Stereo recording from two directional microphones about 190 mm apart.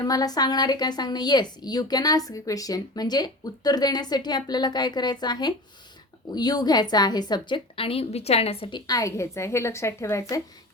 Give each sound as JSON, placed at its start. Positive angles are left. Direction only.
{"t": 0.0, "sound": "a woman's voice", "side_deg": 20}